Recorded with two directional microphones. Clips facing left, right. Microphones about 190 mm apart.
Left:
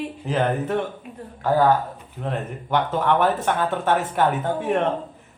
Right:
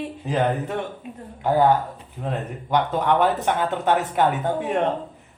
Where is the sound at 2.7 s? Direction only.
15° right (ahead or behind).